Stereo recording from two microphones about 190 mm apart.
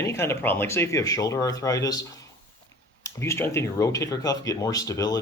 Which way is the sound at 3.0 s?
15° left (ahead or behind).